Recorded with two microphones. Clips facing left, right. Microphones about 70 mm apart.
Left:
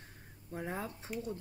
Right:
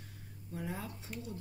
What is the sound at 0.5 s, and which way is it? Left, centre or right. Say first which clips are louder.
Speech: left 2 dB; left.